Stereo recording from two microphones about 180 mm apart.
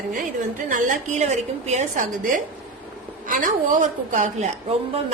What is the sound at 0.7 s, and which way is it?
A woman's voice, 45° right (ahead or behind).